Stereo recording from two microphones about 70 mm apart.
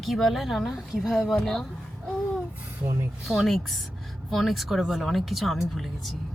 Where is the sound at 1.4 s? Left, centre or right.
Centre.